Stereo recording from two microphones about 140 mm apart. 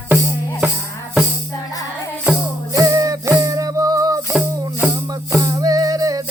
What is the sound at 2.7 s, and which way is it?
Music, 25° right (ahead or behind).